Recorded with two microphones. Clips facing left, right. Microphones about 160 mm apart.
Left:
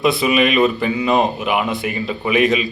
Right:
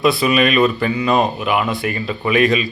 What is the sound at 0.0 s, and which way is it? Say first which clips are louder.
Speech: right 1 dB; 20° left (ahead or behind).